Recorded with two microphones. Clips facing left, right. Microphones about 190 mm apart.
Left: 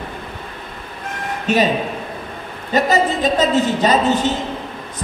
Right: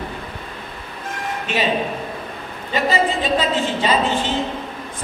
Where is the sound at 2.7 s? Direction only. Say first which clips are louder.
Left 3 dB; 40° left (ahead or behind).